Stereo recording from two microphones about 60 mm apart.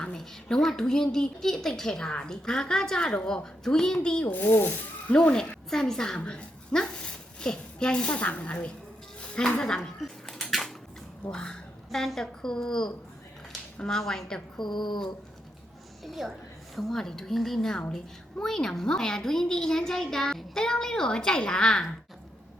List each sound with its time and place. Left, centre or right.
0.2 s speech: centre
4.3 s speech: left
5.1 s a woman's voice: centre
9.2 s a sound: centre
11.3 s speech: centre
11.9 s speech: centre
16.0 s a woman's voice: centre